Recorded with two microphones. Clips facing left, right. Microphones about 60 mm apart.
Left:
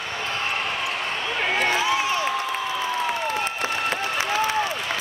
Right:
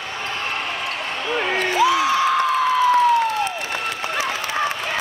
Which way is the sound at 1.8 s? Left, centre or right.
Right.